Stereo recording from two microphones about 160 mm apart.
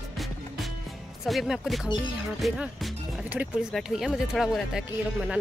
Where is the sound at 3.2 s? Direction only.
10° right (ahead or behind).